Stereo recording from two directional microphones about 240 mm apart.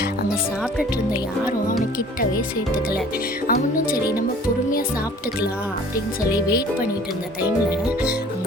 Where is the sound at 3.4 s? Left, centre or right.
Left.